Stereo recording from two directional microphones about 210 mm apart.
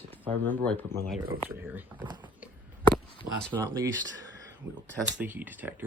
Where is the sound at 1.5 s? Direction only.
10° right (ahead or behind).